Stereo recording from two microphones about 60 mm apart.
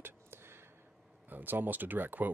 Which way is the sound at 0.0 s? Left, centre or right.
Right.